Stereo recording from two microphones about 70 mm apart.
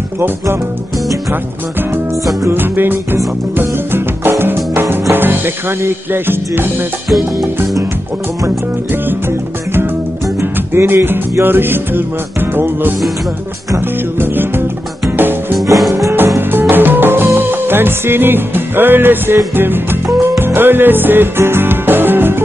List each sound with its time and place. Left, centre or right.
2.5 s music: right
10.4 s music: right
14.2 s music: right